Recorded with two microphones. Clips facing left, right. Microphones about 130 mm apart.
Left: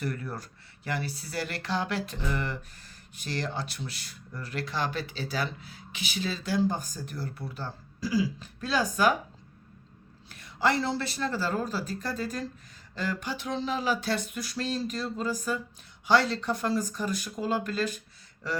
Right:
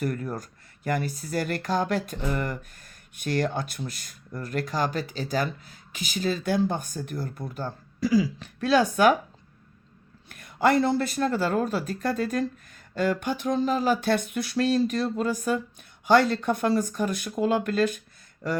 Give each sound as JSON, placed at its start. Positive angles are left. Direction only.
{"t": 0.0, "sound": "speech", "side_deg": -45}
{"t": 8.0, "sound": "speech", "side_deg": -70}
{"t": 10.2, "sound": "speech", "side_deg": -50}